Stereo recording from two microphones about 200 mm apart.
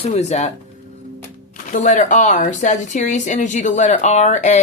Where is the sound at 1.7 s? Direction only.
40° left (ahead or behind).